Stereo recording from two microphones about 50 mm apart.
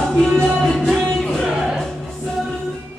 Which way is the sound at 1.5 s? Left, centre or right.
Centre.